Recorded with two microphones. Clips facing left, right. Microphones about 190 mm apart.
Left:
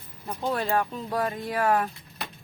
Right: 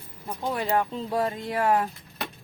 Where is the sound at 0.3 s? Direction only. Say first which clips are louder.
Even; 15° right (ahead or behind).